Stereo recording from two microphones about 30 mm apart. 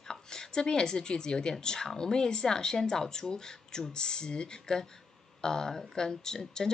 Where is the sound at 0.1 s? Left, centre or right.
Left.